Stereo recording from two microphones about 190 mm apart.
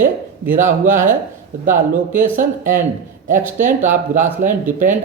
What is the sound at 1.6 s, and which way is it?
Speech, 45° right (ahead or behind).